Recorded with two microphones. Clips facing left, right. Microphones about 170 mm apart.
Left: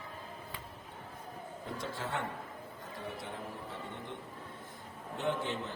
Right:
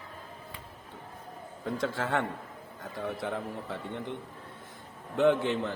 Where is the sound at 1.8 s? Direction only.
90° right.